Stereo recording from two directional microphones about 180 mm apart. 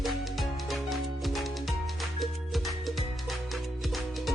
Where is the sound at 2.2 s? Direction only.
Centre (ahead or behind).